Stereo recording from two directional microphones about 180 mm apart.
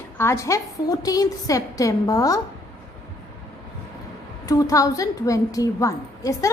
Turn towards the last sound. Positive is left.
turn(degrees=20)  # may be behind; listen again after turning